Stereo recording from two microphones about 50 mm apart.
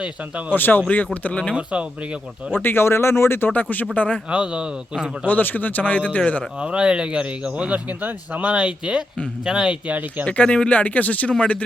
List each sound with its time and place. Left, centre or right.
0.0 s speech: right
0.5 s a man's voice: left
0.9 s speech: left
1.5 s speech: right
2.5 s speech: left
3.5 s a man's voice: left
4.3 s a man's voice: centre
5.2 s a man's voice: left
6.6 s speech: right
8.4 s a man's voice: right
9.8 s speech: right
10.2 s speech: left